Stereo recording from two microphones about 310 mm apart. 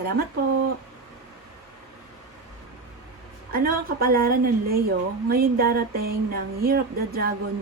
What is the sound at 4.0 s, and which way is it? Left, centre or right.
Speech, right.